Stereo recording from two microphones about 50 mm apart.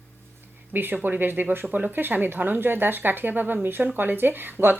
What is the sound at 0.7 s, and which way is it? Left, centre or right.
Speech, right.